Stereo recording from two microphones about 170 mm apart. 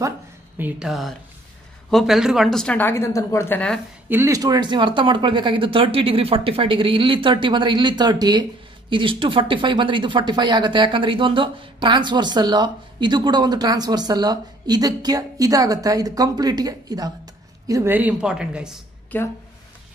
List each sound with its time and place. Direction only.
0.6 s speech: 5° right (ahead or behind)
4.1 s speech: 15° right (ahead or behind)
19.1 s speech: 10° left (ahead or behind)